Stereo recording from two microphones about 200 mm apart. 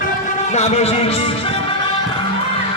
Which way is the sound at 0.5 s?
30° left (ahead or behind).